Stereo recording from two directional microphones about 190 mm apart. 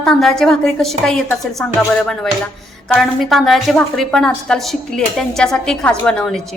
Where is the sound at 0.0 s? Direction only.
Centre (ahead or behind).